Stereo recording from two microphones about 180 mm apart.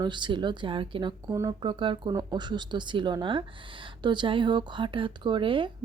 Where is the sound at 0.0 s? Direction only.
25° right (ahead or behind).